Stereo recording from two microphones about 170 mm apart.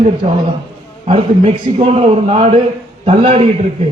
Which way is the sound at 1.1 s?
35° right (ahead or behind).